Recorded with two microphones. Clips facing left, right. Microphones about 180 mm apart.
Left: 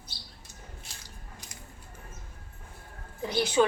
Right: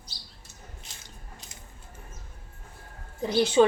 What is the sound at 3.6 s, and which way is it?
Speech, 25° right (ahead or behind).